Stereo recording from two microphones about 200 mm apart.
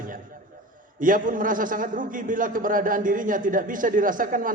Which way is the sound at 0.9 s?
40° right (ahead or behind).